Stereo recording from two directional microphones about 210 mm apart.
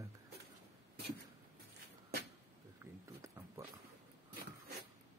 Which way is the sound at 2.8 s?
10° right (ahead or behind).